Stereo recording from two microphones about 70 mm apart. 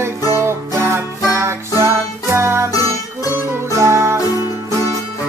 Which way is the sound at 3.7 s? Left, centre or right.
Right.